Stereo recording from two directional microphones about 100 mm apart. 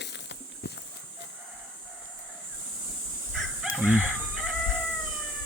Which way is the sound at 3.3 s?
5° right (ahead or behind).